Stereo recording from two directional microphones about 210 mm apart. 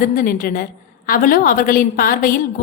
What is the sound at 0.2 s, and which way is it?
A woman's voice, 40° left (ahead or behind).